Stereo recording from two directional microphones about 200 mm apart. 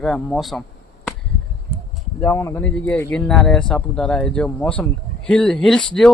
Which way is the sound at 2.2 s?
15° left (ahead or behind).